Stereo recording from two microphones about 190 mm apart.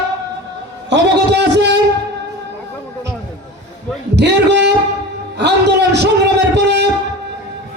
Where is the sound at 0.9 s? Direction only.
65° right (ahead or behind).